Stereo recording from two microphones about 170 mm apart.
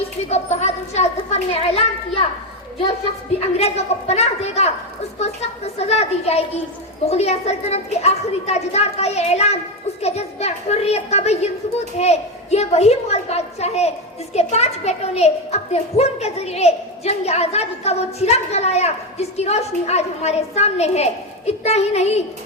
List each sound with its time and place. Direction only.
0.0 s speech: 40° left (ahead or behind)
3.6 s a child's voice: 40° left (ahead or behind)